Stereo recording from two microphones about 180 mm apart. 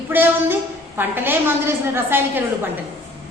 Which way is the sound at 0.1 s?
10° right (ahead or behind).